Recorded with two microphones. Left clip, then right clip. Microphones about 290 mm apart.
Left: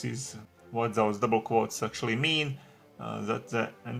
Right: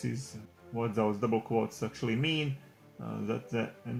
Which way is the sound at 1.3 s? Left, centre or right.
Left.